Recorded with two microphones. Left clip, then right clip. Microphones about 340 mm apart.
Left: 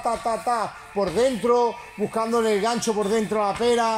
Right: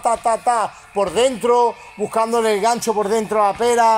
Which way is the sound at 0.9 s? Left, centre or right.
Right.